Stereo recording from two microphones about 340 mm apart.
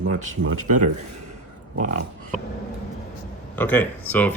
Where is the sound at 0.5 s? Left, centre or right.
Right.